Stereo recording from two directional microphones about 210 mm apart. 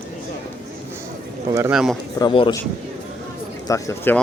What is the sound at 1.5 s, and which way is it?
Speech, 15° right (ahead or behind).